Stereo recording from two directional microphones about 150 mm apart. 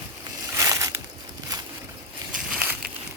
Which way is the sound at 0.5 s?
20° right (ahead or behind).